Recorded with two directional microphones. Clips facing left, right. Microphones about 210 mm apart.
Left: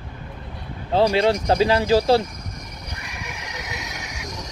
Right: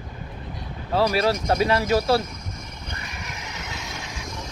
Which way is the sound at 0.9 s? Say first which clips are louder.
Left 3 dB; 30° left (ahead or behind).